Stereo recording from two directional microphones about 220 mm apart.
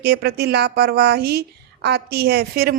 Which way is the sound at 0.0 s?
45° right (ahead or behind).